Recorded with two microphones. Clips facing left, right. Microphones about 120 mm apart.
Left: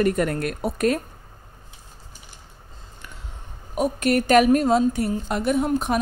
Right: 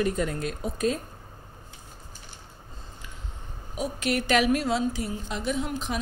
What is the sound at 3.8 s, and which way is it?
Speech, 50° left (ahead or behind).